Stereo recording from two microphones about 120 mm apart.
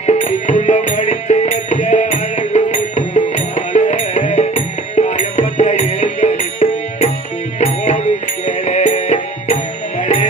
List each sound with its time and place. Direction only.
0.0 s music: 75° left (ahead or behind)